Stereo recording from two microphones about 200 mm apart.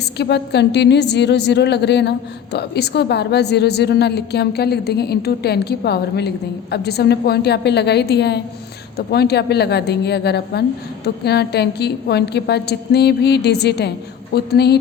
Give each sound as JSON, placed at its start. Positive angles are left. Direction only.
{"t": 0.0, "sound": "a woman's voice", "side_deg": 55}